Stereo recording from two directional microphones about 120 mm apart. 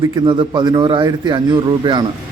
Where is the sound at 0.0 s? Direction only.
40° right (ahead or behind).